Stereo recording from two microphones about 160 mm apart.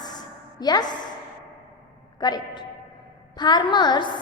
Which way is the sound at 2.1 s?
25° left (ahead or behind).